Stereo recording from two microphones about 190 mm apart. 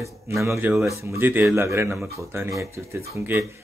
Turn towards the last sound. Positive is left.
turn(degrees=-15)  # may be behind; listen again after turning